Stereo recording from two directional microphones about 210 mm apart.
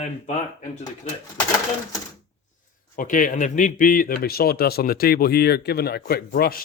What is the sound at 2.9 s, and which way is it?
A man's voice, 40° left (ahead or behind).